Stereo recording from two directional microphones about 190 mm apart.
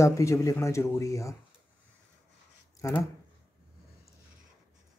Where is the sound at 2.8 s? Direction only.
15° left (ahead or behind).